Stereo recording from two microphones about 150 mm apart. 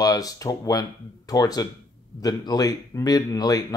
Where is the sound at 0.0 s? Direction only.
25° left (ahead or behind).